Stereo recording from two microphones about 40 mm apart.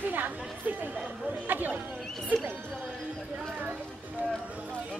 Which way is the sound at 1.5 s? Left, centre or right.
Right.